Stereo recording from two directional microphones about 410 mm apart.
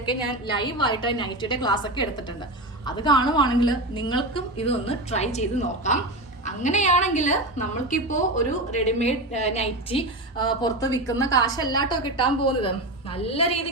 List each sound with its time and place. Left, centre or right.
0.0 s a woman's voice: centre